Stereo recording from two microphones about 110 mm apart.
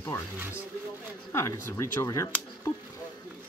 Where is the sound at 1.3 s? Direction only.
25° left (ahead or behind).